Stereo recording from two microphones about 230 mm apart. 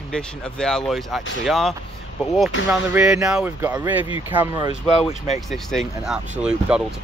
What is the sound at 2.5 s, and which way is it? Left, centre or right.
Speech, left.